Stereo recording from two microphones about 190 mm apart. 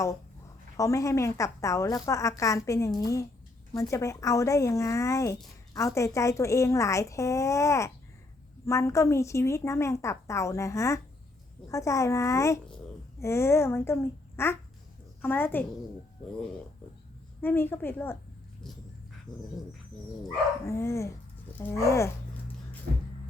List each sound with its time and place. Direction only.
0.8 s speech: 15° left (ahead or behind)
17.4 s speech: 10° left (ahead or behind)
20.7 s speech: 15° left (ahead or behind)